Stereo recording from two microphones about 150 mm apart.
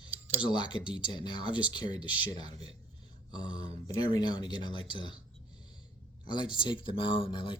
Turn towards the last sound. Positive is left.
turn(degrees=35)  # may be behind; listen again after turning